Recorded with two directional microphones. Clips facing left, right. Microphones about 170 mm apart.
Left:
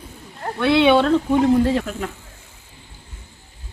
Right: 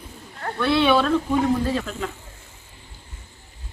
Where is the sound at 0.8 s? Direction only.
25° left (ahead or behind).